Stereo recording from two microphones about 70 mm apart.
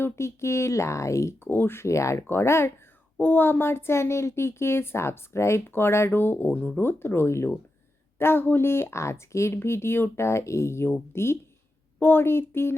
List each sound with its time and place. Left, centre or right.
0.0 s speech: left
1.5 s speech: left